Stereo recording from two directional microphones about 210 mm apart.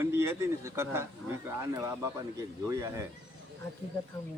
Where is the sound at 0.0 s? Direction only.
10° right (ahead or behind).